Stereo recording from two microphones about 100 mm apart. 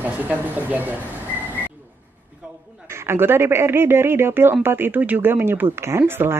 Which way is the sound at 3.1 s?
25° right (ahead or behind).